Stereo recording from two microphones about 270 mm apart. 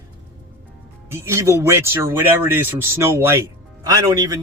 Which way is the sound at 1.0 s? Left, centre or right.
Centre.